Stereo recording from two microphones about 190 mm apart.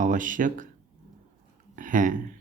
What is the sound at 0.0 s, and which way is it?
Speech, 45° right (ahead or behind).